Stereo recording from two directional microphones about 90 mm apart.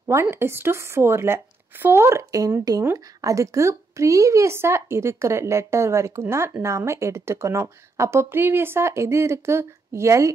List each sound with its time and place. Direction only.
0.1 s a woman's voice: 30° right (ahead or behind)